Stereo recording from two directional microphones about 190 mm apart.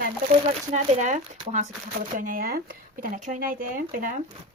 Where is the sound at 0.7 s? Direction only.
40° right (ahead or behind).